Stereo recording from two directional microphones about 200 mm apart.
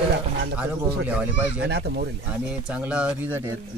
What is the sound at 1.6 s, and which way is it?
Speech, 55° right (ahead or behind).